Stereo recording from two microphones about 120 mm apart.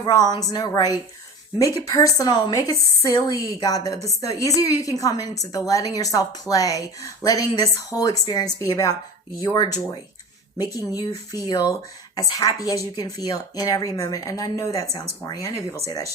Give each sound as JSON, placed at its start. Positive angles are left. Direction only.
{"t": 0.0, "sound": "a woman's voice", "side_deg": 35}
{"t": 11.4, "sound": "a woman's voice", "side_deg": 35}